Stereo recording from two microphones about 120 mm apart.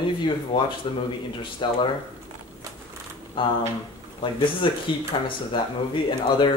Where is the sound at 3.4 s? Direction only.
45° left (ahead or behind).